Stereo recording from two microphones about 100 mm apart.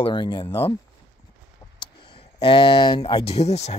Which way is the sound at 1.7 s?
50° left (ahead or behind).